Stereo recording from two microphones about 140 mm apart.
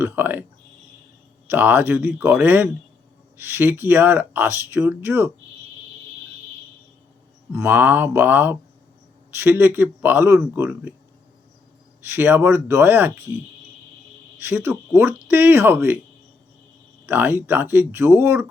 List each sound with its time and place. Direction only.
0.0 s speech: 15° right (ahead or behind)
1.5 s speech: 15° right (ahead or behind)
7.5 s speech: 15° right (ahead or behind)
12.0 s speech: 15° right (ahead or behind)
14.4 s speech: 15° right (ahead or behind)
17.1 s speech: 15° right (ahead or behind)